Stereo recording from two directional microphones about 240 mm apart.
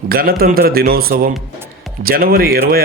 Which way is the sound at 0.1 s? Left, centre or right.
Right.